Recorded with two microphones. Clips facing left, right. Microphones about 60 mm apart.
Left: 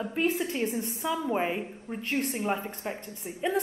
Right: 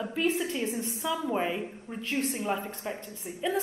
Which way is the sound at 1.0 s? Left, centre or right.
Left.